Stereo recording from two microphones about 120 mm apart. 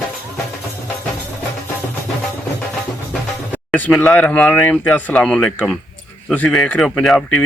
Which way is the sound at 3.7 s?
10° left (ahead or behind).